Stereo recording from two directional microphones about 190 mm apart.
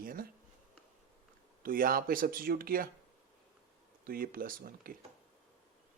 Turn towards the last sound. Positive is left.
turn(degrees=-50)  # may be behind; listen again after turning